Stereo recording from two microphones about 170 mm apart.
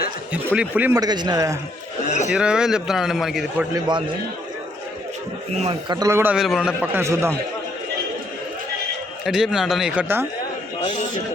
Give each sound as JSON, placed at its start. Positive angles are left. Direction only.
{"t": 0.5, "sound": "a man's voice", "side_deg": -10}
{"t": 0.9, "sound": "a man's voice", "side_deg": -25}
{"t": 2.0, "sound": "speech", "side_deg": 45}
{"t": 2.3, "sound": "a man's voice", "side_deg": -5}
{"t": 3.8, "sound": "a man's voice", "side_deg": -25}
{"t": 5.9, "sound": "a man's voice", "side_deg": -20}
{"t": 6.3, "sound": "a man's voice", "side_deg": 0}
{"t": 9.2, "sound": "a man's voice", "side_deg": 0}